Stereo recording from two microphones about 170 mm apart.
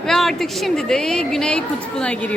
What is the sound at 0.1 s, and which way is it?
A woman's voice, centre (ahead or behind).